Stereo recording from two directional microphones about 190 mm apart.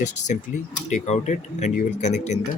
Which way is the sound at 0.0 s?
40° left (ahead or behind).